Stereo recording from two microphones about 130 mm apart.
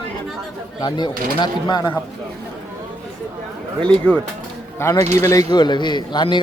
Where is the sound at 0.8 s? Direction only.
35° left (ahead or behind).